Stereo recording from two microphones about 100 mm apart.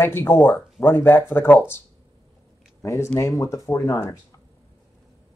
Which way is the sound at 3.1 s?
30° left (ahead or behind).